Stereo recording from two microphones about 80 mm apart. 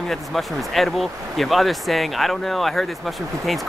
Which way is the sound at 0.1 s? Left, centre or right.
Centre.